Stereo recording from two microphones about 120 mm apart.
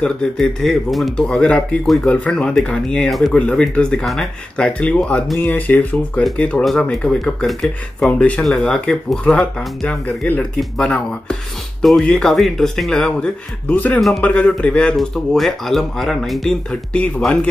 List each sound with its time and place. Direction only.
0.0 s speech: 5° left (ahead or behind)